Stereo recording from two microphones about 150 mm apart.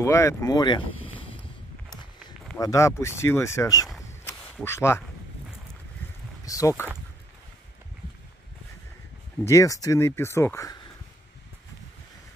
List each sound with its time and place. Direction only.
0.0 s speech: 20° left (ahead or behind); by 1.2 s 35° left (ahead or behind)
2.6 s speech: 20° left (ahead or behind)
6.4 s speech: 20° left (ahead or behind)
9.4 s speech: 20° left (ahead or behind)